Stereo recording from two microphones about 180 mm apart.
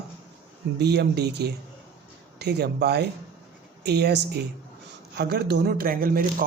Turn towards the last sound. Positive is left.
turn(degrees=-50)  # may be behind; listen again after turning